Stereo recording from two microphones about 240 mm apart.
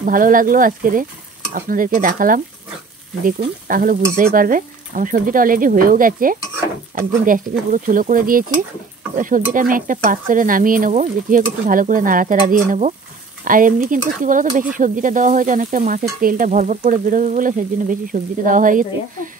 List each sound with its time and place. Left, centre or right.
0.0 s sizzle: right